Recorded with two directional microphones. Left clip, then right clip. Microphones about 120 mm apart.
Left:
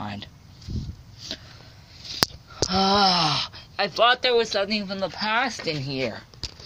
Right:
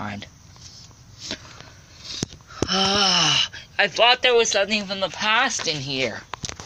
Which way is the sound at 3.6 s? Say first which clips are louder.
Right 3 dB; 20° left (ahead or behind).